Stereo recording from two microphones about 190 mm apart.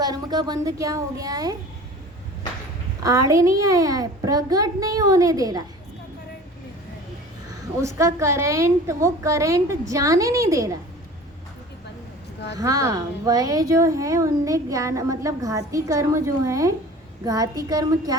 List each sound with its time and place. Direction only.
0.0 s speech: 20° right (ahead or behind)
3.0 s a child's voice: 20° right (ahead or behind)
7.8 s a woman's voice: 15° right (ahead or behind)
12.5 s a woman's voice: 20° right (ahead or behind)